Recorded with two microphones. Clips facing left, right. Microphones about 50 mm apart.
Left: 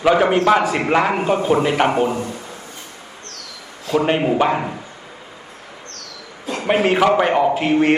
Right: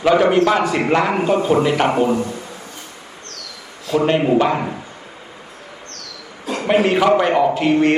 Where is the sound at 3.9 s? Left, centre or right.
Centre.